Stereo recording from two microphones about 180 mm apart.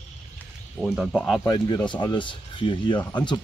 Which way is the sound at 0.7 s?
5° right (ahead or behind).